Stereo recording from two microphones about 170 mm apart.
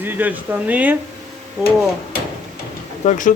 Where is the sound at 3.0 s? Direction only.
50° left (ahead or behind).